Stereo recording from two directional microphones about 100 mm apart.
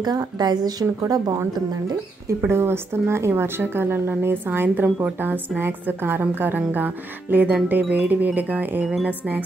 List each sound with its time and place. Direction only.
0.0 s speech: 40° right (ahead or behind)
2.2 s speech: 25° right (ahead or behind)